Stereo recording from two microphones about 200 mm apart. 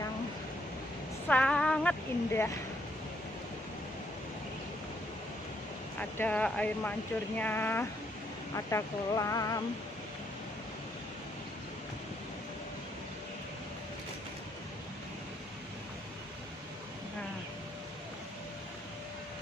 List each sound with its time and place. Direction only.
1.3 s speech: 5° left (ahead or behind)
5.9 s speech: 5° left (ahead or behind)